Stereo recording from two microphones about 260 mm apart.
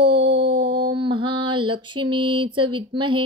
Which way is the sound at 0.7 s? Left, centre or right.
Centre.